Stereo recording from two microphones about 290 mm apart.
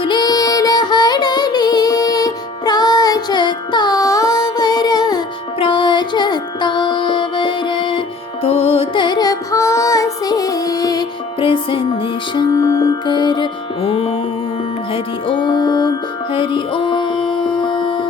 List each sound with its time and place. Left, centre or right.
0.0 s music: centre